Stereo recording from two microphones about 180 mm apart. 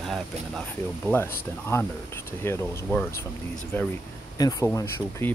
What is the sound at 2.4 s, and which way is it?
Speech, 15° left (ahead or behind).